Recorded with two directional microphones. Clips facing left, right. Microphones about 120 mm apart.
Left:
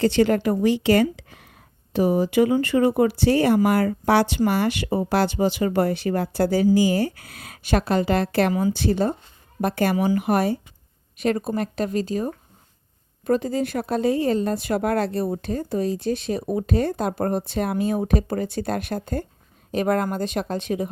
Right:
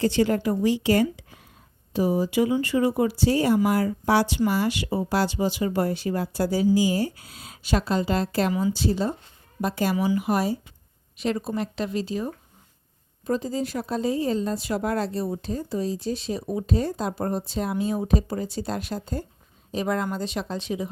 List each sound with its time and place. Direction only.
0.0 s a woman's voice: 65° left (ahead or behind); by 12.3 s 45° left (ahead or behind)
13.2 s a woman's voice: 60° left (ahead or behind)